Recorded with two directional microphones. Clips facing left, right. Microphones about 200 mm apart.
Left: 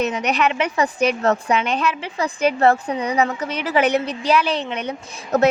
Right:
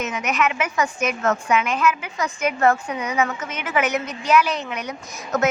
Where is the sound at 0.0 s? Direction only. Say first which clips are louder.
Left 3 dB; 35° left (ahead or behind).